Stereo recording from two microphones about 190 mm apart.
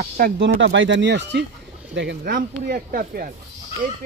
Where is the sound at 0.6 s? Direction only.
75° right (ahead or behind); by 3.2 s 50° right (ahead or behind).